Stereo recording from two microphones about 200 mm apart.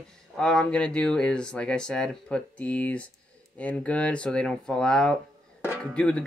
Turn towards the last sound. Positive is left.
turn(degrees=5)  # may be behind; listen again after turning